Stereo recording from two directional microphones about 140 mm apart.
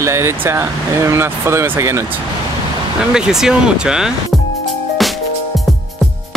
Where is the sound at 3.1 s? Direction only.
5° right (ahead or behind).